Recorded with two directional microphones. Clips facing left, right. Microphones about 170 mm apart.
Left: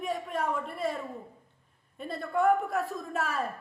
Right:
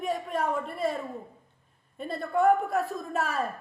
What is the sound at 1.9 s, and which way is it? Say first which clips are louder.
A man's voice: right 2 dB; 35° right (ahead or behind).